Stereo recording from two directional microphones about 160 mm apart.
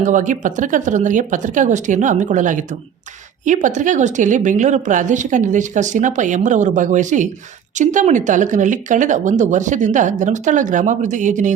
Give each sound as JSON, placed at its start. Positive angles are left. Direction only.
{"t": 0.0, "sound": "speech", "side_deg": -50}